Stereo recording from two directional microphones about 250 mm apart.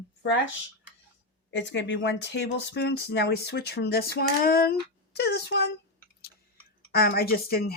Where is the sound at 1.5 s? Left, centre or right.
Left.